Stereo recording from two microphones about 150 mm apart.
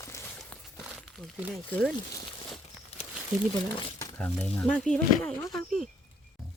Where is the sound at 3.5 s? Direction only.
25° left (ahead or behind).